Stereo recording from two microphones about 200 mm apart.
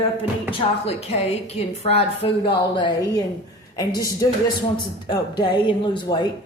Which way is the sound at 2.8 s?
20° left (ahead or behind).